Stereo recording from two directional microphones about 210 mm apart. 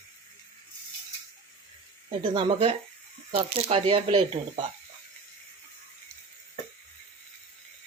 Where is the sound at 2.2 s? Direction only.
20° right (ahead or behind).